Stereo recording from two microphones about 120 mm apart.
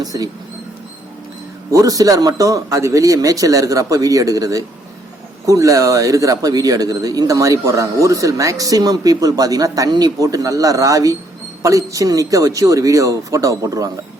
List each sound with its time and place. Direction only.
0.0 s speech: 30° right (ahead or behind)
1.7 s a man's voice: 30° right (ahead or behind)